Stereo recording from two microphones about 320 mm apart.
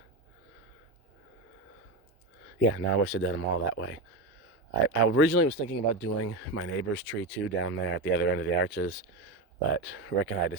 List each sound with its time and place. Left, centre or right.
2.6 s speech: left
5.0 s speech: left